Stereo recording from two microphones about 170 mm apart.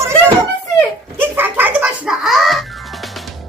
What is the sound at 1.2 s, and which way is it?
Music, 10° right (ahead or behind).